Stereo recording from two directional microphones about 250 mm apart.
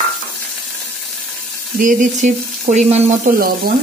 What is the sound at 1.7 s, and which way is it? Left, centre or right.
Frying, right.